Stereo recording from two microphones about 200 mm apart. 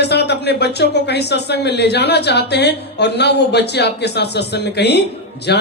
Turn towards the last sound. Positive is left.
turn(degrees=55)  # may be behind; listen again after turning